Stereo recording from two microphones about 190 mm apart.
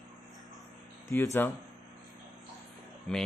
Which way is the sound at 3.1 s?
Centre (ahead or behind).